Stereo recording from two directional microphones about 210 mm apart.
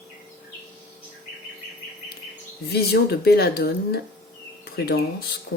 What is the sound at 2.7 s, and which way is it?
Speech, 50° left (ahead or behind).